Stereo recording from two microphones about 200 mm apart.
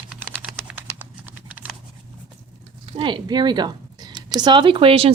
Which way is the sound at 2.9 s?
25° right (ahead or behind).